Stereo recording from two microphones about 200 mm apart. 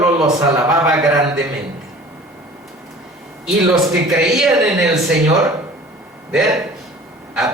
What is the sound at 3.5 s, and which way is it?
Speech, centre (ahead or behind).